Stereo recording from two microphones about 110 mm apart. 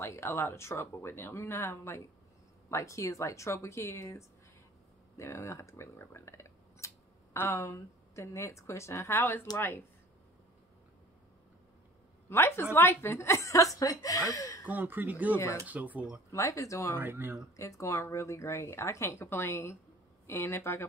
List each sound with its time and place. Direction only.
0.0 s speech: 25° left (ahead or behind)
12.3 s speech: 25° left (ahead or behind)
14.6 s speech: 15° right (ahead or behind)
16.3 s speech: 30° left (ahead or behind)
16.9 s speech: 20° right (ahead or behind)
17.6 s speech: 30° left (ahead or behind)